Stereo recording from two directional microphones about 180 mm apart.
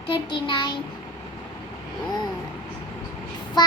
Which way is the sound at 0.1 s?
25° left (ahead or behind).